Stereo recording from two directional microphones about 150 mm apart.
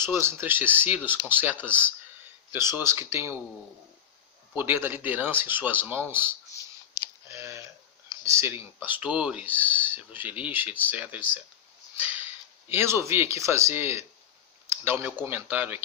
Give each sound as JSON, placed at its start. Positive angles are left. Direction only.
{"t": 0.0, "sound": "speech", "side_deg": -15}
{"t": 4.5, "sound": "speech", "side_deg": -15}
{"t": 7.3, "sound": "a sound", "side_deg": -20}
{"t": 8.2, "sound": "speech", "side_deg": -20}
{"t": 14.7, "sound": "a sound", "side_deg": -15}
{"t": 15.2, "sound": "speech", "side_deg": -15}